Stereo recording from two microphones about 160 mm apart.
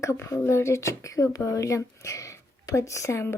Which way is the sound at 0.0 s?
20° left (ahead or behind).